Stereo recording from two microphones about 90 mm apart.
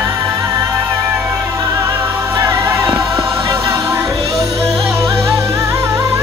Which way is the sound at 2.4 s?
30° right (ahead or behind).